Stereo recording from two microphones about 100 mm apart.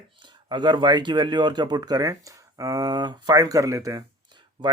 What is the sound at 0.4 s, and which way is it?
Speech, 50° right (ahead or behind).